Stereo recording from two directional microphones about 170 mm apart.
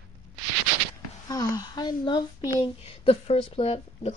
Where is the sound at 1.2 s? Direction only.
20° left (ahead or behind).